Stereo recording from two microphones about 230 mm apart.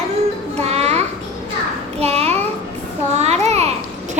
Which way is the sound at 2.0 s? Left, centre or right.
Right.